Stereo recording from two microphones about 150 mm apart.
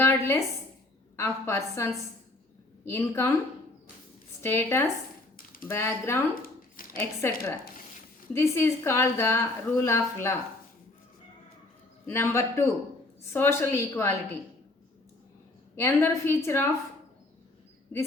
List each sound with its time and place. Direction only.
0.0 s a sound: 15° left (ahead or behind)
1.1 s a woman's voice: 20° left (ahead or behind)
4.4 s a woman's voice: 15° left (ahead or behind)
6.3 s a sound: 75° left (ahead or behind)
7.0 s a woman's voice: 15° left (ahead or behind)
12.0 s a woman's voice: 15° left (ahead or behind)
15.7 s a woman's voice: 15° left (ahead or behind)